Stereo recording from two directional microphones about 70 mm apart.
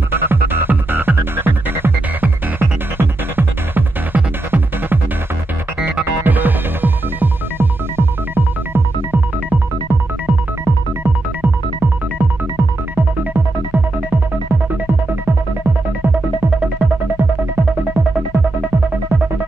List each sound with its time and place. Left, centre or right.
0.1 s music: right